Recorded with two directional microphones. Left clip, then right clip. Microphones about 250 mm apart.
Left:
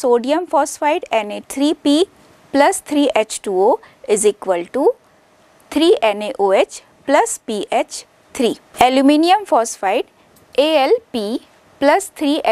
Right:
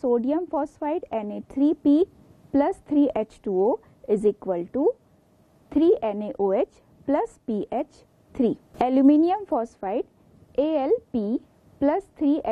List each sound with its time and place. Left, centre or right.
0.0 s a woman's voice: centre
3.5 s speech: left
4.1 s a woman's voice: centre